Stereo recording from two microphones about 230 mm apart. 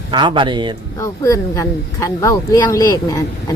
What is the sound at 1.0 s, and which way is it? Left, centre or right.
Speech, centre.